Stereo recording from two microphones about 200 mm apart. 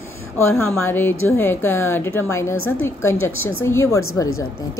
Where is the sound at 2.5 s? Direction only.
90° left.